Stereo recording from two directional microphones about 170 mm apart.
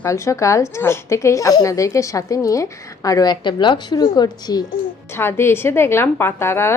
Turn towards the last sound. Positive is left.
turn(degrees=15)  # may be behind; listen again after turning